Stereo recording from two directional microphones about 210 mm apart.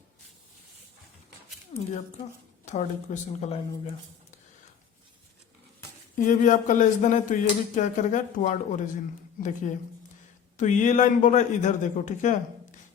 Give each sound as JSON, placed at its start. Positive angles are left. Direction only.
{"t": 1.7, "sound": "a man's voice", "side_deg": 25}
{"t": 6.1, "sound": "a man's voice", "side_deg": 40}